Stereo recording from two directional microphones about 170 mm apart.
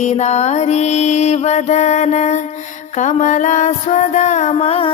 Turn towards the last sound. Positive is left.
turn(degrees=35)  # may be behind; listen again after turning